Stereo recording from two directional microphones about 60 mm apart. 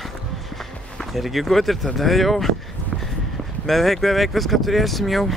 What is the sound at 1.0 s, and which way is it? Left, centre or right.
Speech, centre.